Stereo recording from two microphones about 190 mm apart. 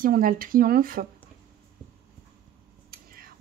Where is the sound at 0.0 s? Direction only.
50° right (ahead or behind).